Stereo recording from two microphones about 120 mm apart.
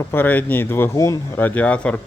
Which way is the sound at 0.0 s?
20° left (ahead or behind).